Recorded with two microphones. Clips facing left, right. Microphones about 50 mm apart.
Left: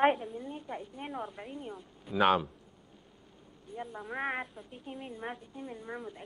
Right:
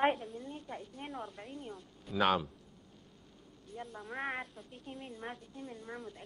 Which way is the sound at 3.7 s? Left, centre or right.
Centre.